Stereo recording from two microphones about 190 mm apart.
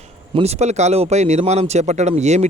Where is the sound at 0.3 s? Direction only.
35° right (ahead or behind).